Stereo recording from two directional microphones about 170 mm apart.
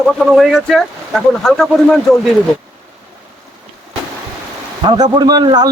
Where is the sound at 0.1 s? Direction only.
Centre (ahead or behind).